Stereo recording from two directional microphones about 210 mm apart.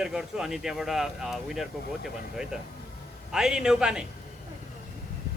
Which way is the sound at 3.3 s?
5° right (ahead or behind).